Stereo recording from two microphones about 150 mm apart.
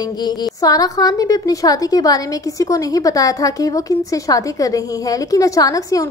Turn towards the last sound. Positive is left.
turn(degrees=25)  # may be behind; listen again after turning